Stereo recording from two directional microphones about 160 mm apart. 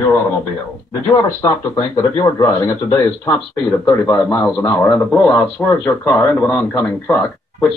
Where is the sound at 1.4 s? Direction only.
20° left (ahead or behind).